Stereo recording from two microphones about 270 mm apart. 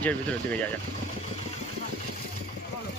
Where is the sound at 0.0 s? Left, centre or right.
Centre.